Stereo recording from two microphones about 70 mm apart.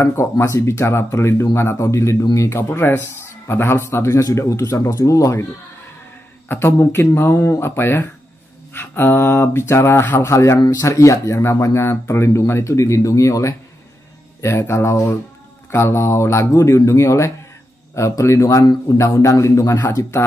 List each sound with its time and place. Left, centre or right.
0.0 s speech: left
6.5 s speech: left